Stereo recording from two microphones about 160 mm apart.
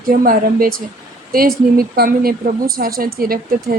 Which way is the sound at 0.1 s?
60° right (ahead or behind).